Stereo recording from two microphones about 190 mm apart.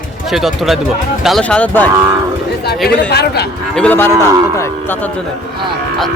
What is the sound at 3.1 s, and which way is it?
Speech, 60° left (ahead or behind).